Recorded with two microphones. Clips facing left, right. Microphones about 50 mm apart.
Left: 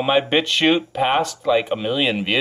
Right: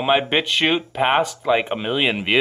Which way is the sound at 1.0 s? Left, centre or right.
Centre.